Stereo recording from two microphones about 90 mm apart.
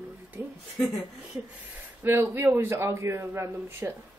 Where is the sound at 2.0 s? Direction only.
25° right (ahead or behind).